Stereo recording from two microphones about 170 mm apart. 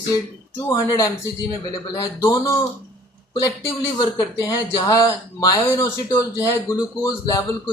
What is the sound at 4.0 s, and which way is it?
Speech, 25° left (ahead or behind).